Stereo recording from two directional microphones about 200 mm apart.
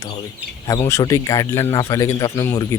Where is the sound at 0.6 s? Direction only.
15° left (ahead or behind).